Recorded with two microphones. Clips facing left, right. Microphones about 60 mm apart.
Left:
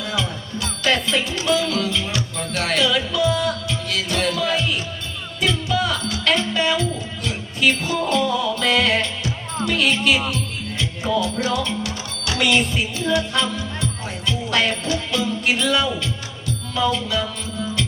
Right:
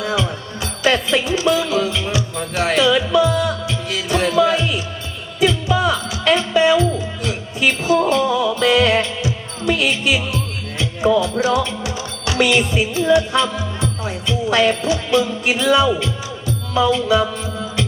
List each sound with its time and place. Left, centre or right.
0.0 s music: right
12.5 s music: centre
13.1 s music: right
15.4 s music: centre